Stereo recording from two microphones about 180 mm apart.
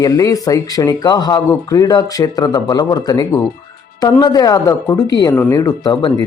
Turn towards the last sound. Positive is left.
turn(degrees=20)  # may be behind; listen again after turning